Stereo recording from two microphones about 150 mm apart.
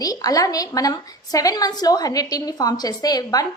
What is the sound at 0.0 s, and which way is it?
A woman's voice, 25° left (ahead or behind).